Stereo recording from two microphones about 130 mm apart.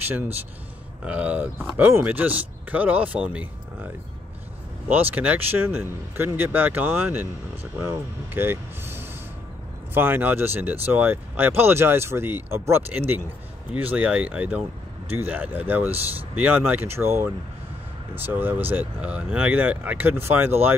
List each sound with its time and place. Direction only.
1.0 s speech: 10° right (ahead or behind)
5.1 s speech: 10° right (ahead or behind)